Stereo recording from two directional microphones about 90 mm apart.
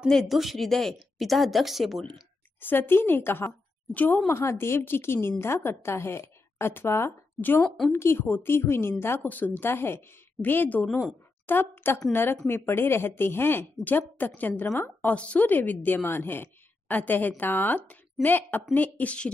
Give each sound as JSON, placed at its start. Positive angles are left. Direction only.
{"t": 0.1, "sound": "a woman's voice", "side_deg": 0}
{"t": 2.6, "sound": "a woman's voice", "side_deg": 20}